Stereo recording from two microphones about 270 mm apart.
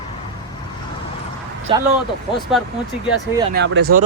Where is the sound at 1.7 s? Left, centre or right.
Centre.